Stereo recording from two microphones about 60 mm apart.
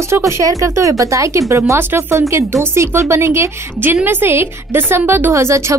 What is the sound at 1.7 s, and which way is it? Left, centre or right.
Speech, right.